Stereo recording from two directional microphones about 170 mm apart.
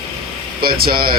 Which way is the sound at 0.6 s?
60° right (ahead or behind).